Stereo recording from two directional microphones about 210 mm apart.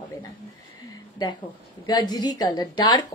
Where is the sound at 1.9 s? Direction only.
20° left (ahead or behind).